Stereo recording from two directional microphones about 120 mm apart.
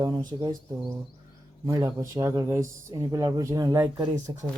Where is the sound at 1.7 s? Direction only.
30° right (ahead or behind).